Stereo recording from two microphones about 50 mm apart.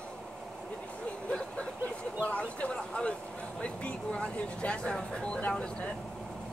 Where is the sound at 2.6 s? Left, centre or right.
Centre.